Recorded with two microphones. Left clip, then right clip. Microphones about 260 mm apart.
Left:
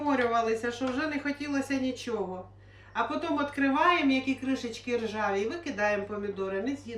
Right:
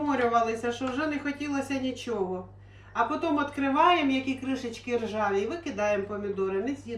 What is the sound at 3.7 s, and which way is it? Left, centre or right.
Speech, centre.